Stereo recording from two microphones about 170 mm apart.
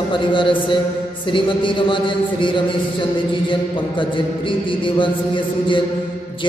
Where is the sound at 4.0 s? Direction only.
30° left (ahead or behind).